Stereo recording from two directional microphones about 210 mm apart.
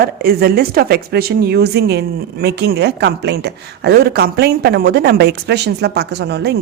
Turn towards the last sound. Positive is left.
turn(degrees=-50)  # may be behind; listen again after turning